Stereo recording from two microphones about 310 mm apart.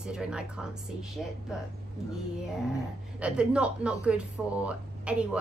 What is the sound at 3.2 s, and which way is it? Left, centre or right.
A woman's voice, centre.